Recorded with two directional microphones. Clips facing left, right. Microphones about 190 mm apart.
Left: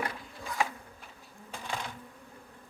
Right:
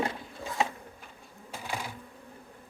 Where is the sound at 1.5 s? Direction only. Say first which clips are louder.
Right 1 dB; 10° right (ahead or behind).